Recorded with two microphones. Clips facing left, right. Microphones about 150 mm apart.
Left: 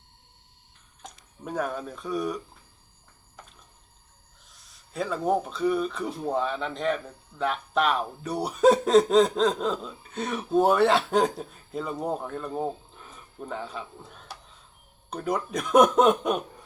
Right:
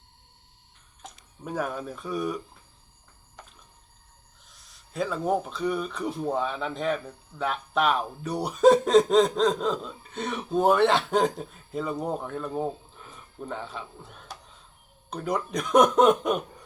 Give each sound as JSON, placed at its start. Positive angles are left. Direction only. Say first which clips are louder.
{"t": 1.0, "sound": "speech", "louder": "even", "side_deg": 0}
{"t": 4.5, "sound": "speech", "louder": "right 1 dB", "side_deg": 0}
{"t": 13.1, "sound": "a sound", "louder": "even", "side_deg": 0}
{"t": 15.1, "sound": "speech", "louder": "even", "side_deg": 0}